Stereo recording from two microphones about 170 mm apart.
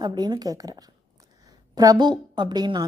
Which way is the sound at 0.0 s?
25° right (ahead or behind).